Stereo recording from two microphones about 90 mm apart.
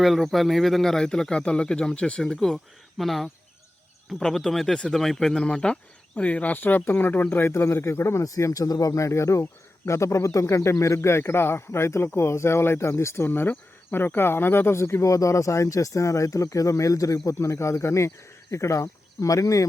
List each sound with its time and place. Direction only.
0.0 s speech: centre (ahead or behind); by 19.6 s 40° left (ahead or behind)